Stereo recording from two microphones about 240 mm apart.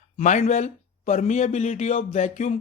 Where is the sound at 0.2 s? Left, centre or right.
Left.